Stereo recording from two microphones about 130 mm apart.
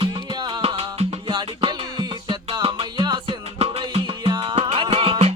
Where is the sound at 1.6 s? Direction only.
35° right (ahead or behind).